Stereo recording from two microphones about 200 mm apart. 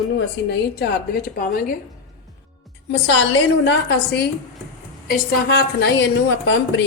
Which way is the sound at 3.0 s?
65° left (ahead or behind).